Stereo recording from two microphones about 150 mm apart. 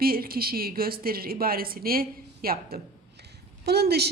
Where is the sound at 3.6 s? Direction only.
90° right.